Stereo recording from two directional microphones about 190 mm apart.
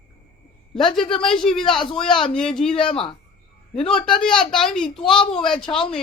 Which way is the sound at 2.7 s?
25° left (ahead or behind).